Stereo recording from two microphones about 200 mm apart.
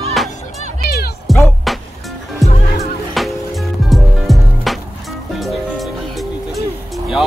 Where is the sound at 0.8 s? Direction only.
50° left (ahead or behind).